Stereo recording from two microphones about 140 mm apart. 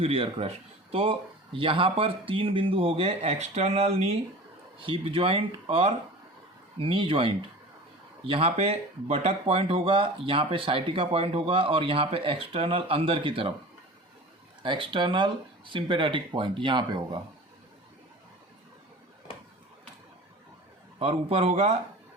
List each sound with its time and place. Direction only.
0.0 s speech: 40° right (ahead or behind)
14.6 s speech: 35° right (ahead or behind)
21.0 s speech: 40° right (ahead or behind)